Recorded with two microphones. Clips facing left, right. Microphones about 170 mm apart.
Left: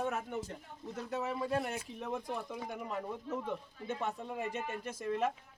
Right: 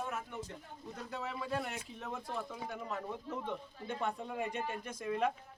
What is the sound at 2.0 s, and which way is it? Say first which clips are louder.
Speech: left 3 dB; 15° left (ahead or behind).